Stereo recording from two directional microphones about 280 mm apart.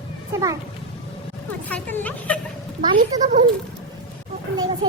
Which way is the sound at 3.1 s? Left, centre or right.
Centre.